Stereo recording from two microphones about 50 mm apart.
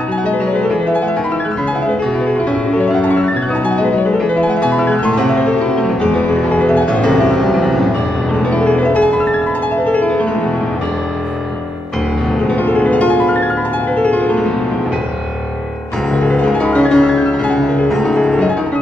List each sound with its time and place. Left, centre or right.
2.7 s music: left
5.2 s music: centre
6.0 s music: left
6.9 s music: centre
8.5 s music: left
12.6 s music: left
16.2 s music: centre